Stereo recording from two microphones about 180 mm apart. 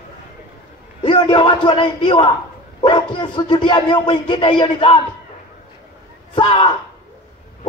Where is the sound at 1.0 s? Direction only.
25° left (ahead or behind).